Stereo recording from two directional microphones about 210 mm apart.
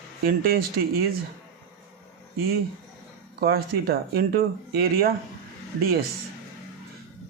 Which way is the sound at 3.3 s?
45° right (ahead or behind).